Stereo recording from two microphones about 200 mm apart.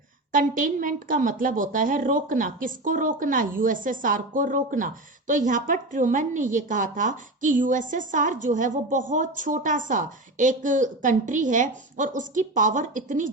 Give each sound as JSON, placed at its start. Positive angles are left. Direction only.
{"t": 0.3, "sound": "a woman's voice", "side_deg": -40}